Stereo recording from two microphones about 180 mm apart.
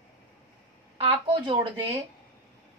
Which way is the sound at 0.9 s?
25° right (ahead or behind).